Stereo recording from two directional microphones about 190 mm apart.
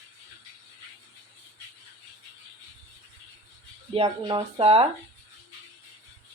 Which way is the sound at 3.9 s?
25° right (ahead or behind).